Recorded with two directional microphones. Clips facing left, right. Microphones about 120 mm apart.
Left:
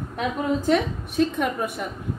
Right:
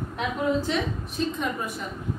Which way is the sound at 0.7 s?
60° left (ahead or behind).